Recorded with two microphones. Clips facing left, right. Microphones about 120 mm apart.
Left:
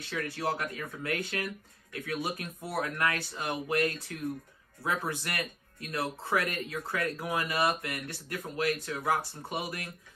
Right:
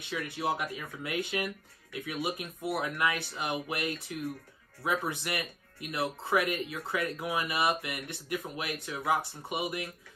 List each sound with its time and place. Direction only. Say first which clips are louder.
0.3 s speech: right 2 dB; 20° right (ahead or behind)